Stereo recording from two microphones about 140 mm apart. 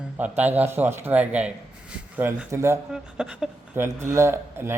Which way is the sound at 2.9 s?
5° right (ahead or behind).